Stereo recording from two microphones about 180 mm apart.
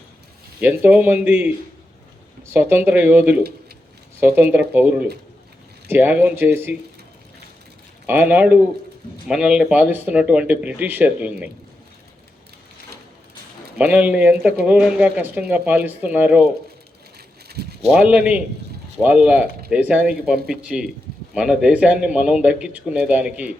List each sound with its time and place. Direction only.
0.6 s speech: 10° right (ahead or behind)
2.5 s speech: 10° right (ahead or behind)
8.0 s speech: 10° right (ahead or behind)
13.7 s speech: 5° right (ahead or behind)
17.5 s a sound: 60° right (ahead or behind)
17.9 s speech: 5° right (ahead or behind)